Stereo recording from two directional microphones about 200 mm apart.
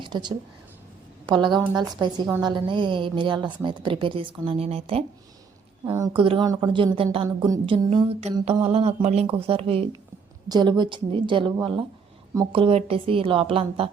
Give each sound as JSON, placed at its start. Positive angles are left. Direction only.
{"t": 0.0, "sound": "a woman's voice", "side_deg": -20}
{"t": 5.8, "sound": "a woman's voice", "side_deg": -15}
{"t": 8.5, "sound": "a sound", "side_deg": -30}
{"t": 9.2, "sound": "a woman's voice", "side_deg": -30}